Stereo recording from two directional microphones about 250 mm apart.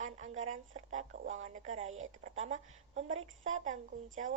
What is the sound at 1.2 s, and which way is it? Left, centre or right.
Speech, right.